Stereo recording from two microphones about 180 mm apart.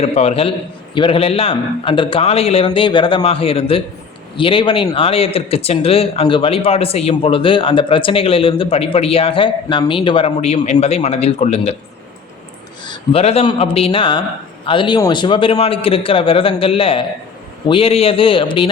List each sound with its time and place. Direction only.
0.0 s speech: 35° left (ahead or behind)
12.8 s a man's voice: 30° left (ahead or behind)